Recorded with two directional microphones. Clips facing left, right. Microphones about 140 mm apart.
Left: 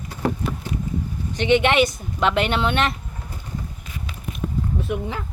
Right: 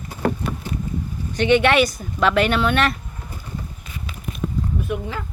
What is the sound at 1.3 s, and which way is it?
Speech, 20° left (ahead or behind).